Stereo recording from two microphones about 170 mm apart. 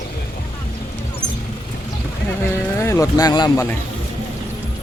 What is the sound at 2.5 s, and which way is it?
Music, 15° left (ahead or behind).